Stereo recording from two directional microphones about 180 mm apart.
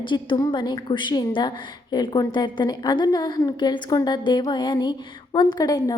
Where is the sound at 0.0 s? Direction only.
25° left (ahead or behind).